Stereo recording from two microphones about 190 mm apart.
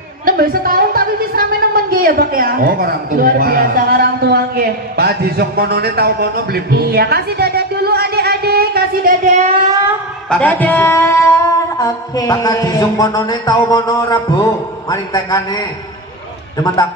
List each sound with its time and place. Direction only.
0.2 s a woman's voice: 50° right (ahead or behind)
10.3 s singing: 10° left (ahead or behind)